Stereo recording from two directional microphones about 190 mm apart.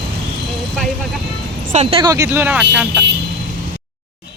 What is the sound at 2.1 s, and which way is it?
Speech, 15° right (ahead or behind).